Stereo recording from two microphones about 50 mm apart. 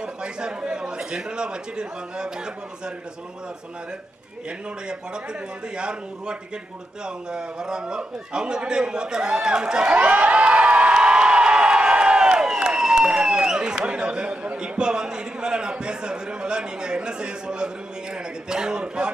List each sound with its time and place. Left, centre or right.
0.0 s a man's voice: centre
4.5 s a man's voice: centre
18.1 s a sound: centre